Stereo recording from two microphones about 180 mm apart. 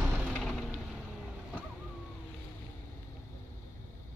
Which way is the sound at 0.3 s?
5° left (ahead or behind).